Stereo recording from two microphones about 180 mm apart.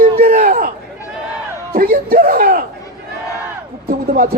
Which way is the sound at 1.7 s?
55° right (ahead or behind).